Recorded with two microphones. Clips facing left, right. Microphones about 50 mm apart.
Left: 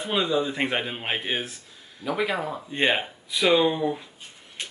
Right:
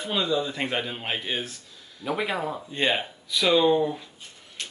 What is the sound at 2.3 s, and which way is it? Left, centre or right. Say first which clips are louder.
Speech: even; centre.